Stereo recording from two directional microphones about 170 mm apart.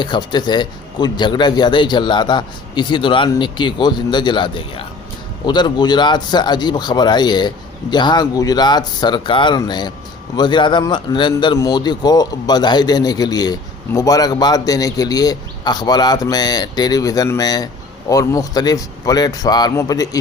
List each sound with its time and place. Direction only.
0.0 s a man's voice: 25° left (ahead or behind)